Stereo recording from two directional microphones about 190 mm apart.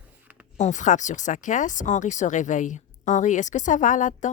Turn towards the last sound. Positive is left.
turn(degrees=40)  # may be behind; listen again after turning